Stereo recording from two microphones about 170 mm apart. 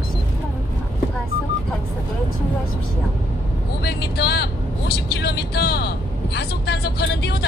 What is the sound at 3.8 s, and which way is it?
Vehicle, 75° left (ahead or behind).